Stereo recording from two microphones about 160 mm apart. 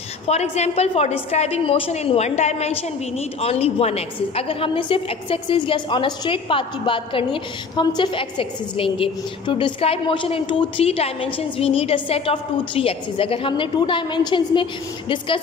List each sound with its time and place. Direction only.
0.3 s a woman's voice: 40° left (ahead or behind)